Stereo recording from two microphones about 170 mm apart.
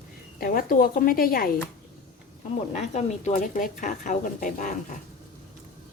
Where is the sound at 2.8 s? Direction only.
40° left (ahead or behind).